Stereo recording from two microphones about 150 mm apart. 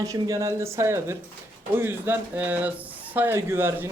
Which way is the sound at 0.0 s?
20° right (ahead or behind).